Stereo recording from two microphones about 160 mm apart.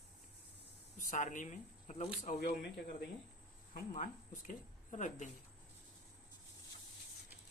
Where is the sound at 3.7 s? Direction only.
55° left (ahead or behind).